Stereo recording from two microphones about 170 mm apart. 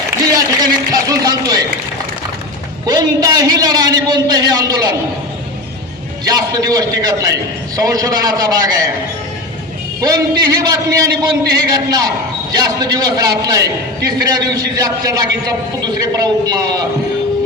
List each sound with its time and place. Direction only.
0.3 s a man's voice: 20° right (ahead or behind)
2.8 s a man's voice: 20° right (ahead or behind)
6.2 s a man's voice: 20° right (ahead or behind)
10.0 s a man's voice: 20° right (ahead or behind)